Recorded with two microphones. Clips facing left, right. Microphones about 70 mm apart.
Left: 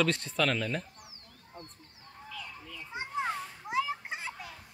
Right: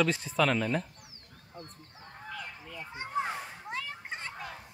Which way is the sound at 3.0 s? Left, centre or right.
Left.